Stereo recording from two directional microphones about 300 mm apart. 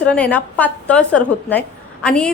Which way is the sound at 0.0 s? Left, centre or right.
Centre.